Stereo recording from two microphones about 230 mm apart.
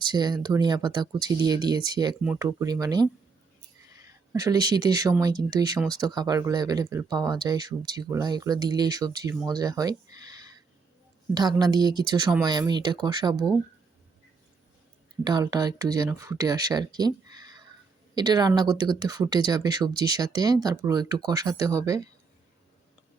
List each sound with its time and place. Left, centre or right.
0.1 s speech: centre
9.5 s a sound: centre
11.3 s speech: centre
15.2 s speech: centre